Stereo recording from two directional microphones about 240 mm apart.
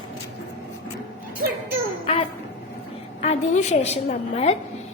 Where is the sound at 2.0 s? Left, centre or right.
Left.